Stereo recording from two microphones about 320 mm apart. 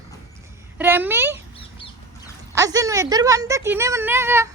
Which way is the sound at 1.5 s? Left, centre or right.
Centre.